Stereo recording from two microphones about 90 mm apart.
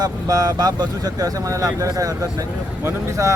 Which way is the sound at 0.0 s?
45° right (ahead or behind).